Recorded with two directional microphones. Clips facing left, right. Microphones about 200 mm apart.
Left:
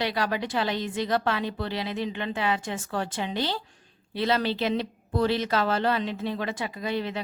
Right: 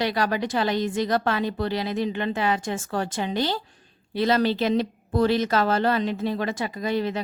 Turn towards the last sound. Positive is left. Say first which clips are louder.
# right 4 dB
turn(degrees=-40)  # may be behind; listen again after turning